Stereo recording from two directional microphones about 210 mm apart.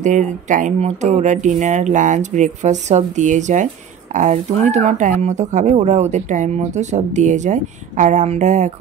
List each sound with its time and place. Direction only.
0.0 s speech: 35° right (ahead or behind)